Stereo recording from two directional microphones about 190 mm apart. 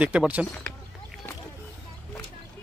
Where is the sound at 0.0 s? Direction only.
5° right (ahead or behind).